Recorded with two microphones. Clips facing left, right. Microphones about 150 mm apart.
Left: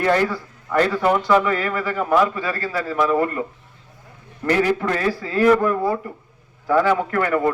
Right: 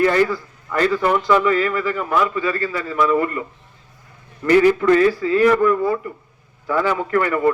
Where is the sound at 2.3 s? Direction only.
35° left (ahead or behind).